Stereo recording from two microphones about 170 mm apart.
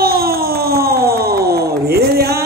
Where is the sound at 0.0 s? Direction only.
65° right (ahead or behind).